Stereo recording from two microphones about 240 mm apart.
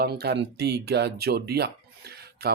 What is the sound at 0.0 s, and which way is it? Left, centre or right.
Speech, right.